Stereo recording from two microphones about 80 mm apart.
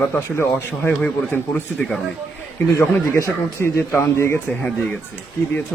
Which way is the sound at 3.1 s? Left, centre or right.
Left.